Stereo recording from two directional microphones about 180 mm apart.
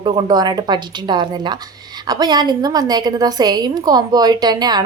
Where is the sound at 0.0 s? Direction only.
25° right (ahead or behind).